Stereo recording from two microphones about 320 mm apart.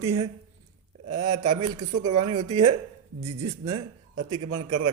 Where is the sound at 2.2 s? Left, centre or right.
Centre.